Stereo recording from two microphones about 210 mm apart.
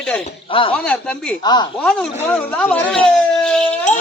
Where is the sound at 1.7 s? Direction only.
5° left (ahead or behind).